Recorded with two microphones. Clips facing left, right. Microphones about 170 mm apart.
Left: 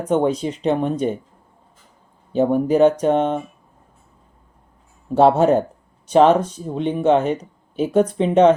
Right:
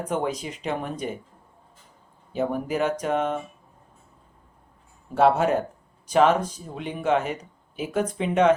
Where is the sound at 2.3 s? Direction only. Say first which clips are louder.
Left 9 dB; 30° left (ahead or behind).